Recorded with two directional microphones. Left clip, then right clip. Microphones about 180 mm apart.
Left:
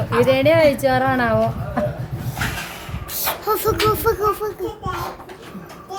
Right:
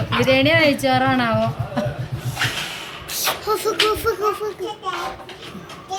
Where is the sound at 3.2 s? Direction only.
75° left (ahead or behind).